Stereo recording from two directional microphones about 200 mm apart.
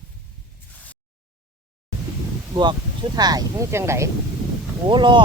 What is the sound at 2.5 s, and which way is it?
Speech, 20° right (ahead or behind).